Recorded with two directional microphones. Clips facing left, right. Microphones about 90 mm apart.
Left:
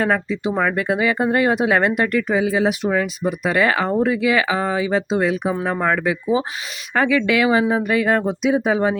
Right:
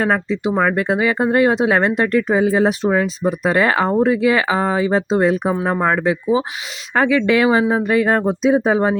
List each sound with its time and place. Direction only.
0.0 s speech: 25° right (ahead or behind)
0.5 s speech: 5° right (ahead or behind)
0.8 s speech: 25° right (ahead or behind)
6.0 s speech: 25° right (ahead or behind)